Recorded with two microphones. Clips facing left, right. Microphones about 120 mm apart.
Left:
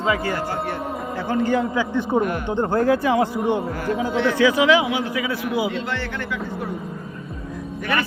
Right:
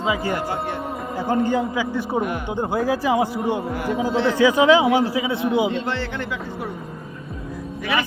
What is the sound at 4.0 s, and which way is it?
A man's voice, 30° right (ahead or behind).